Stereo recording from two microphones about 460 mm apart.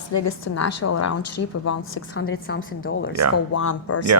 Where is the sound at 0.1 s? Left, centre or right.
Left.